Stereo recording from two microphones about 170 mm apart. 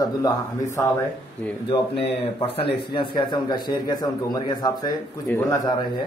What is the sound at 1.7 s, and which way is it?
Speech, 30° left (ahead or behind).